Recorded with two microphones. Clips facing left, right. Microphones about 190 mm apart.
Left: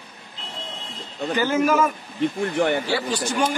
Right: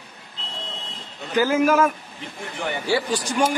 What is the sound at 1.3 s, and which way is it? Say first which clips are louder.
Speech: right 2 dB; 5° right (ahead or behind).